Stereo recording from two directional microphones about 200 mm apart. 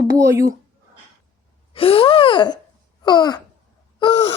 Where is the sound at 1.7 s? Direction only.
30° left (ahead or behind).